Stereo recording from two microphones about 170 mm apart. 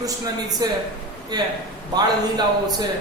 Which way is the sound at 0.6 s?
20° right (ahead or behind).